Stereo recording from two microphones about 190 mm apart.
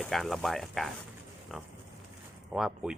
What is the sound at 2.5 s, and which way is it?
Speech, 5° right (ahead or behind).